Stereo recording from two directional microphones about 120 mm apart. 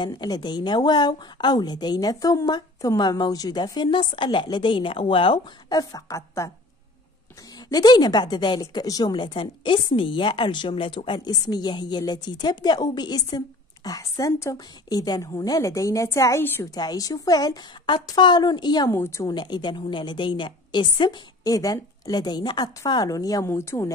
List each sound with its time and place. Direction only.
0.0 s a woman's voice: 35° left (ahead or behind)
7.7 s a woman's voice: 35° left (ahead or behind); by 16.6 s 20° left (ahead or behind)
16.7 s a woman's voice: 30° left (ahead or behind)
18.9 s a woman's voice: 25° left (ahead or behind)
19.3 s a woman's voice: 35° left (ahead or behind); by 23.9 s 20° left (ahead or behind)